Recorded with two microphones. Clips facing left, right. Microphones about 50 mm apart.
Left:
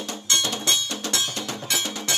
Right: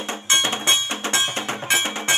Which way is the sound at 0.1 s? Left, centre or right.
Right.